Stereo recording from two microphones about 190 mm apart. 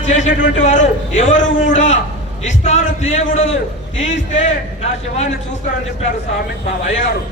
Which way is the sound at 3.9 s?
80° left.